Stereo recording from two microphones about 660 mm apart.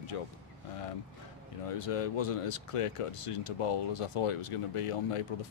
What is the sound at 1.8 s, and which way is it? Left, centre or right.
Speech, left.